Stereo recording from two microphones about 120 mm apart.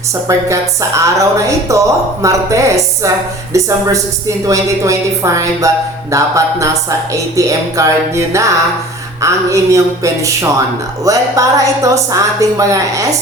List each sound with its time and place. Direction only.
0.3 s a woman's voice: 25° right (ahead or behind)